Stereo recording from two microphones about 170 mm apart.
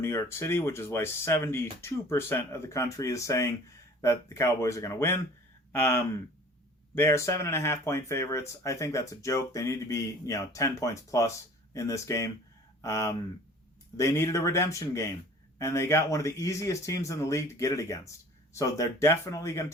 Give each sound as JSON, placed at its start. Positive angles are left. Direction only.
{"t": 0.0, "sound": "speech", "side_deg": 15}